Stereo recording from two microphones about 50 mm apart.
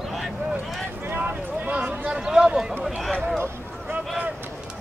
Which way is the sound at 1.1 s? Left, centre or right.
Right.